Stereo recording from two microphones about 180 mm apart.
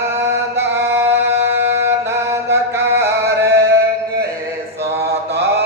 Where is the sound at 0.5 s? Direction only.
15° right (ahead or behind).